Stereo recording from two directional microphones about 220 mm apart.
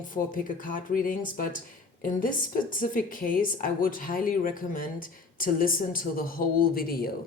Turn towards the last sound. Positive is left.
turn(degrees=40)  # may be behind; listen again after turning